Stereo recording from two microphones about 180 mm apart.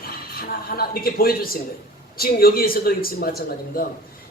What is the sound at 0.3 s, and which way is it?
A man's voice, 55° left (ahead or behind).